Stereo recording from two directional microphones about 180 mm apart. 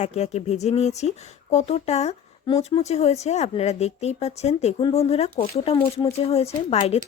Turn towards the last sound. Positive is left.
turn(degrees=35)  # may be behind; listen again after turning